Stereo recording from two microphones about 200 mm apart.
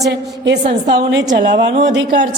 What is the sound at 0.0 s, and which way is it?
A woman's voice, 60° right (ahead or behind).